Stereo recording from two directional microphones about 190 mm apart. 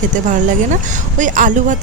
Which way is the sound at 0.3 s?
40° right (ahead or behind).